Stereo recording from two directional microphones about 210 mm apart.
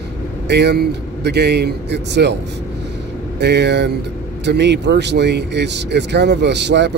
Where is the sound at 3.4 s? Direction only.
55° right (ahead or behind).